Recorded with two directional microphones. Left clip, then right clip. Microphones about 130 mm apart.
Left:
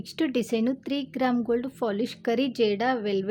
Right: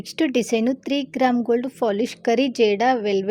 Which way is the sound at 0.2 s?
20° right (ahead or behind).